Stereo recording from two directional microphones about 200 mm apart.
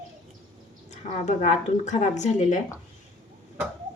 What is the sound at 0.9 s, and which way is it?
A woman's voice, 35° left (ahead or behind).